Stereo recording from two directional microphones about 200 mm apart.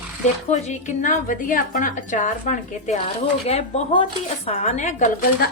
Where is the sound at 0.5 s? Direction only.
35° left (ahead or behind).